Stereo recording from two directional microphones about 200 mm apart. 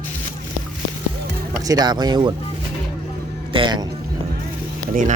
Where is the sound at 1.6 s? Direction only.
20° right (ahead or behind).